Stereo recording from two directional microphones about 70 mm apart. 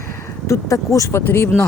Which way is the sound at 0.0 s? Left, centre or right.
Left.